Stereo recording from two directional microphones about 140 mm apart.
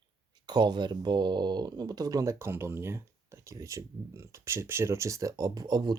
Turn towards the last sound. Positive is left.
turn(degrees=-25)  # may be behind; listen again after turning